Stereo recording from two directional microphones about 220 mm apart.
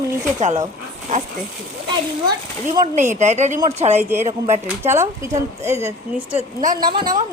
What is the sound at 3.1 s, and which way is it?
Speech, 30° right (ahead or behind).